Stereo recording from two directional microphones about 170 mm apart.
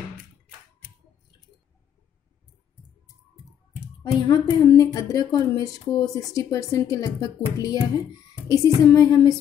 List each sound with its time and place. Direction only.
4.0 s a woman's voice: 25° left (ahead or behind)